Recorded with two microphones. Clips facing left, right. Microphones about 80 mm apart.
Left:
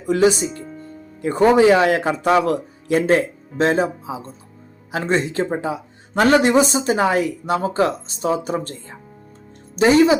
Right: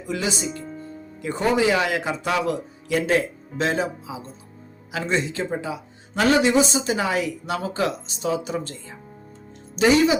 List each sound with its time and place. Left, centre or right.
0.1 s speech: left
0.6 s music: centre
1.2 s a man's voice: left